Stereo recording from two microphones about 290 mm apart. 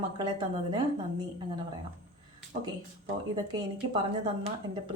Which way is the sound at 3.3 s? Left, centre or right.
Centre.